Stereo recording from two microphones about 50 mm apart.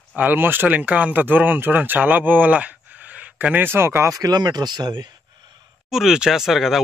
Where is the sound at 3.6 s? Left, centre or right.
Right.